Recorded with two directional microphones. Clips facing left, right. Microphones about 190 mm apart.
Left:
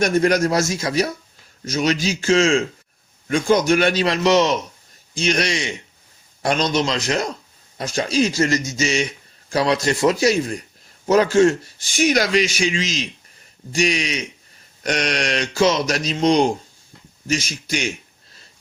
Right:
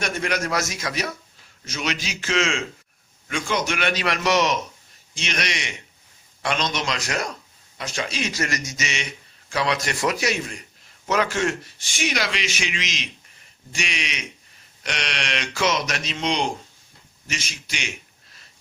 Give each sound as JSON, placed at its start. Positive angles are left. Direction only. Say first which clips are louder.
{"t": 0.0, "sound": "speech", "louder": "left 9 dB", "side_deg": 40}
{"t": 7.8, "sound": "speech", "louder": "left 9 dB", "side_deg": 40}
{"t": 11.9, "sound": "speech", "louder": "left 9 dB", "side_deg": 45}